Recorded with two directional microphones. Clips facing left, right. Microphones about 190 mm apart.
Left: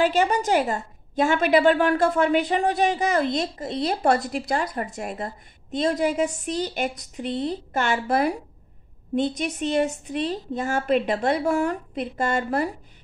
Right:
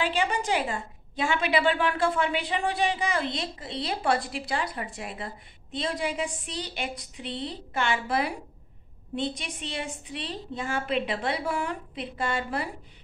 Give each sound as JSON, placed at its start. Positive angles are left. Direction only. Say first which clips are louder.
{"t": 0.0, "sound": "a woman's voice", "louder": "left 7 dB", "side_deg": 45}